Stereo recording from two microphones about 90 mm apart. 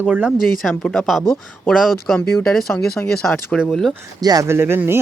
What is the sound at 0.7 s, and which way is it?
Speech, 10° left (ahead or behind).